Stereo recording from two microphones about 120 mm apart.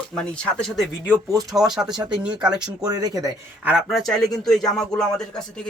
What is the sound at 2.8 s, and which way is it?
Speech, 30° right (ahead or behind).